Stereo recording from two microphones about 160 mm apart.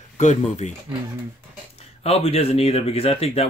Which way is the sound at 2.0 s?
40° left (ahead or behind).